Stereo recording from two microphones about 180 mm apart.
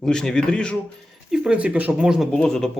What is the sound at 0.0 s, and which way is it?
Speech, 5° left (ahead or behind).